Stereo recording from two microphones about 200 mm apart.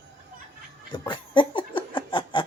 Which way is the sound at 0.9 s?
25° left (ahead or behind).